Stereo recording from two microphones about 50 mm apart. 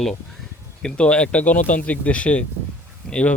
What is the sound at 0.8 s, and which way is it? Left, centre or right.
Speech, left.